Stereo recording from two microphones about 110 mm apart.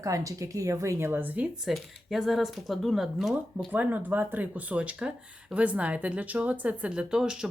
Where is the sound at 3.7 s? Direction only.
15° right (ahead or behind).